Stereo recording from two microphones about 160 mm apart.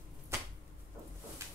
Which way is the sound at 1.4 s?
15° right (ahead or behind).